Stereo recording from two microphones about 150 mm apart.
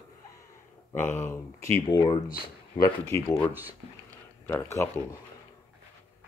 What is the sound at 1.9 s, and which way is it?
Speech, 30° left (ahead or behind).